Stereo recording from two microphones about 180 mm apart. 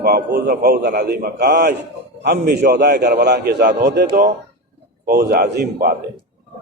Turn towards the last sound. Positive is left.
turn(degrees=-60)  # may be behind; listen again after turning